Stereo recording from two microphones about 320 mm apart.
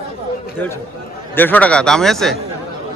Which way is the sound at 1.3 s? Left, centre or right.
Centre.